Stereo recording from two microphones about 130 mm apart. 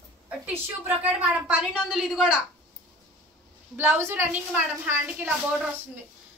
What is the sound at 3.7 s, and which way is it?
A woman's voice, 20° right (ahead or behind).